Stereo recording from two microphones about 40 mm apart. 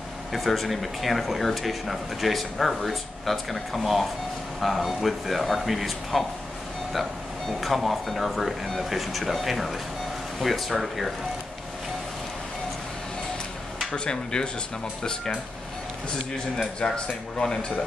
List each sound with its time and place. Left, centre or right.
0.3 s speech: centre
7.6 s speech: centre
13.9 s speech: left
16.8 s speech: left